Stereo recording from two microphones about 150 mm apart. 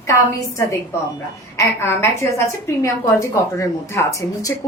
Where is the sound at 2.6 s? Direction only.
20° left (ahead or behind).